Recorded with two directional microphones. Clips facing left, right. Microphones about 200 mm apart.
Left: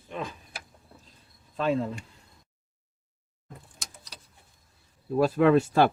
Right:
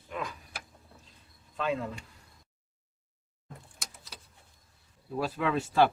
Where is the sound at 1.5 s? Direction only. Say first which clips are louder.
Left 5 dB; 35° left (ahead or behind).